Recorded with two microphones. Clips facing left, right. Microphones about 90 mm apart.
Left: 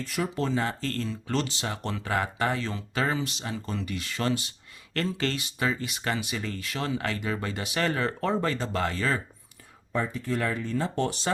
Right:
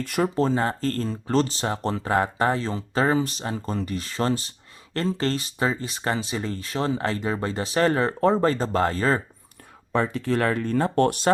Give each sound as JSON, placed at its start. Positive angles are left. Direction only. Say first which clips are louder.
{"t": 0.2, "sound": "speech", "louder": "right 6 dB", "side_deg": -40}
{"t": 9.9, "sound": "speech", "louder": "right 6 dB", "side_deg": -70}